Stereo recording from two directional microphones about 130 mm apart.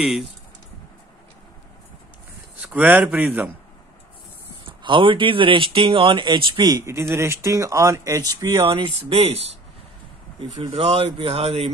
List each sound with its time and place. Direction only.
2.6 s a man's voice: 10° right (ahead or behind)
4.6 s speech: 40° right (ahead or behind)
6.8 s speech: 20° right (ahead or behind)
8.5 s speech: 40° right (ahead or behind)
10.6 s speech: 55° right (ahead or behind)